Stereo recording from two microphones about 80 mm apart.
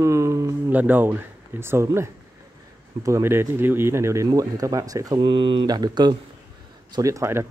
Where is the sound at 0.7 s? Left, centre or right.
Right.